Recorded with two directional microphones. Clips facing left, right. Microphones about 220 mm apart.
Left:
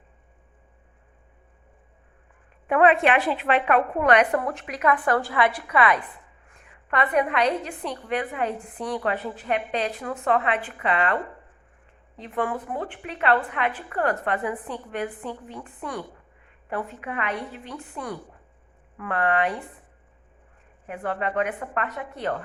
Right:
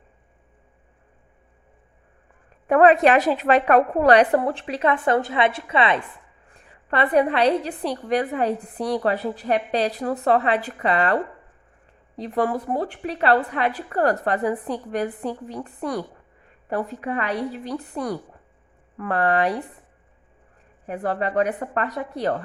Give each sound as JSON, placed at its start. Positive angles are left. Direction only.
{"t": 2.6, "sound": "a woman's voice", "side_deg": -40}
{"t": 20.8, "sound": "a woman's voice", "side_deg": -35}